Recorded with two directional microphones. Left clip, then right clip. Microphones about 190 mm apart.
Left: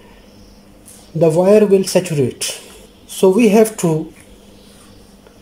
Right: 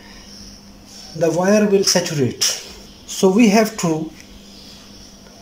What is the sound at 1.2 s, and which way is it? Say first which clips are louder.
Speech: left 5 dB; 20° left (ahead or behind).